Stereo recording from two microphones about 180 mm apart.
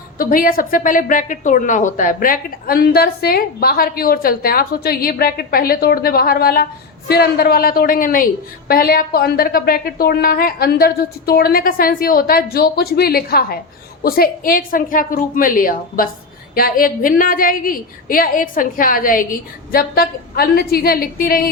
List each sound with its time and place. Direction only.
0.2 s a woman's voice: 50° left (ahead or behind)